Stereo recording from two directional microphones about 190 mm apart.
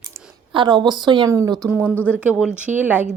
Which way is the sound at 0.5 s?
25° right (ahead or behind).